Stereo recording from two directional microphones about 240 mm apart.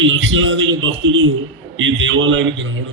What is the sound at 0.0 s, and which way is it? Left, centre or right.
A man's voice, right.